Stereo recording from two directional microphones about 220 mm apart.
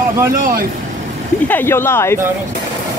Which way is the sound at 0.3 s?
40° right (ahead or behind).